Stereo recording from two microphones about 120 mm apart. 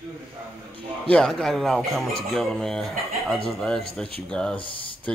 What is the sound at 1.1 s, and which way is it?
Speech, 5° left (ahead or behind).